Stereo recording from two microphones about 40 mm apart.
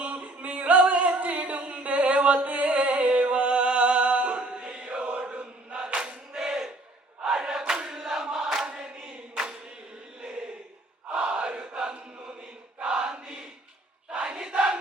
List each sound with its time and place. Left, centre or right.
0.0 s a capella: right
2.6 s music: right
6.0 s choir: centre
7.3 s battle cry: centre
7.7 s a sound: centre
8.6 s choir: right
11.3 s crowd: right
12.9 s chant: right
14.1 s battle cry: right